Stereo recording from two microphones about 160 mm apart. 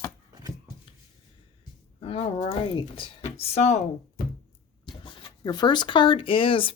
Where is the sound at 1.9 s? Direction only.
40° left (ahead or behind).